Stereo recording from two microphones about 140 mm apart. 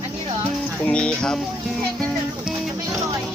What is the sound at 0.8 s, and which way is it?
Speech, 5° left (ahead or behind).